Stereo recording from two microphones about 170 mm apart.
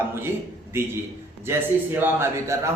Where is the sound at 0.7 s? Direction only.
15° right (ahead or behind).